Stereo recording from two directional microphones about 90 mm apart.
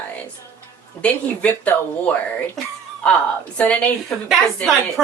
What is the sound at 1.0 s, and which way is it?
A woman's voice, 15° left (ahead or behind).